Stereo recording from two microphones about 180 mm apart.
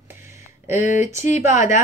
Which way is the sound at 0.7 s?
45° left (ahead or behind).